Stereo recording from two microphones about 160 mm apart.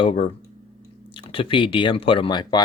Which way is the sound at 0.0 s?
35° left (ahead or behind).